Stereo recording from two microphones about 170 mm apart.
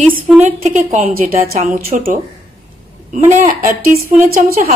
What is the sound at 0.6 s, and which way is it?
A woman's voice, 45° right (ahead or behind).